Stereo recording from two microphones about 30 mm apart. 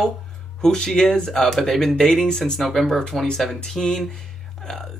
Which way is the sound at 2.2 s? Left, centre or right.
Left.